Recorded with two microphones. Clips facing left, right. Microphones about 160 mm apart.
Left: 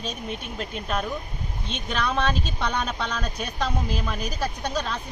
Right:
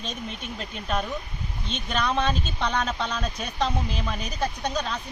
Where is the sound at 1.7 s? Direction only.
5° left (ahead or behind).